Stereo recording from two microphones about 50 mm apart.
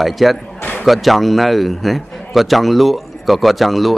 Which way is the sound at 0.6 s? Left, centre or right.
Left.